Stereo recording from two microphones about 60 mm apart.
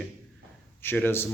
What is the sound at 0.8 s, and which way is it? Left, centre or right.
Speech, left.